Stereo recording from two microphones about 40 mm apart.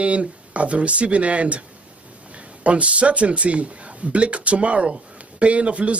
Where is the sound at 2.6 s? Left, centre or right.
Right.